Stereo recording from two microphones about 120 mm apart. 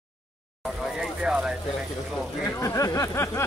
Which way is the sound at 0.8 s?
5° right (ahead or behind).